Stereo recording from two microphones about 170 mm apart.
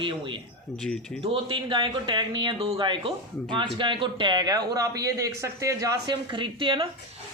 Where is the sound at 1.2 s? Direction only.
30° right (ahead or behind).